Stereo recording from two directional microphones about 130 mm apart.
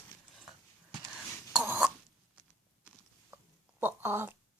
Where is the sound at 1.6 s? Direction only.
10° right (ahead or behind).